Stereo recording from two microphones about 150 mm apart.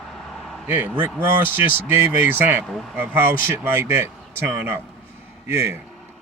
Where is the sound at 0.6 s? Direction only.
15° right (ahead or behind).